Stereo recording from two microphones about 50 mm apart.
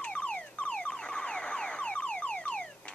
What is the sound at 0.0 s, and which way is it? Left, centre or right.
Car alarm, left.